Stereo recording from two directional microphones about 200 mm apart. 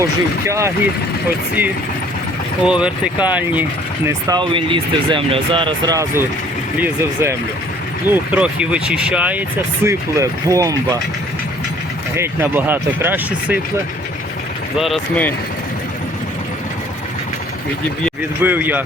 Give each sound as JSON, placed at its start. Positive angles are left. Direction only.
{"t": 0.0, "sound": "speech", "side_deg": -15}
{"t": 2.6, "sound": "speech", "side_deg": -5}
{"t": 4.3, "sound": "speech", "side_deg": -25}
{"t": 12.1, "sound": "speech", "side_deg": -10}
{"t": 14.8, "sound": "speech", "side_deg": 0}
{"t": 18.4, "sound": "speech", "side_deg": -10}